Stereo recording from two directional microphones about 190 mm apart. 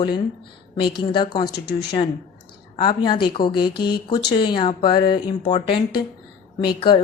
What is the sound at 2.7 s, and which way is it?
A woman's voice, 25° left (ahead or behind).